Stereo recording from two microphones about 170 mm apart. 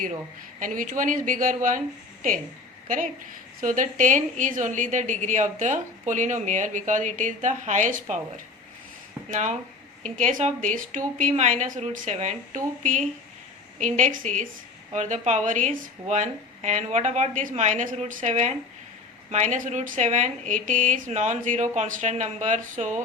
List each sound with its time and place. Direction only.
0.6 s a woman's voice: 50° right (ahead or behind)
2.8 s a woman's voice: 50° right (ahead or behind)
9.3 s a woman's voice: 45° right (ahead or behind)